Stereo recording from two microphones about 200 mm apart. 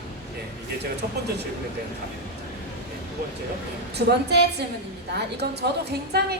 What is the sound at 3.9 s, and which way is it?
Speech, 55° right (ahead or behind).